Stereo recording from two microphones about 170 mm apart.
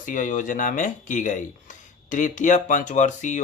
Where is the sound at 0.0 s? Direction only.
50° left (ahead or behind).